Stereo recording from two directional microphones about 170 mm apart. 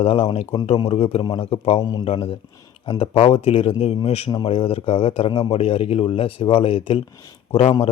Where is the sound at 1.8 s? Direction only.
20° left (ahead or behind).